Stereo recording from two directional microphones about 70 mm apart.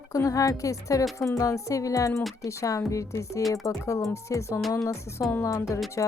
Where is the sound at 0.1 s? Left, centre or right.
Left.